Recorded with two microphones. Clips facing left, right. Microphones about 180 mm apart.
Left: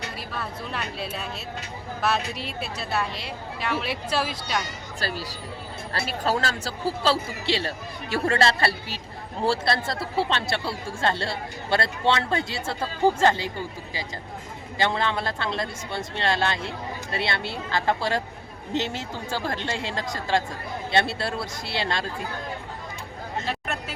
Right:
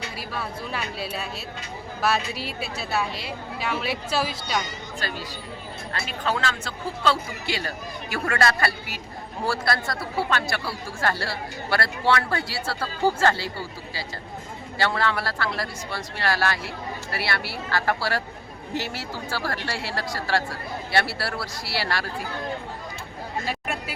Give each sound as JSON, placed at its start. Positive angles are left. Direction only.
{"t": 0.3, "sound": "speech", "side_deg": -5}
{"t": 4.9, "sound": "speech", "side_deg": 35}
{"t": 23.5, "sound": "chatter", "side_deg": -10}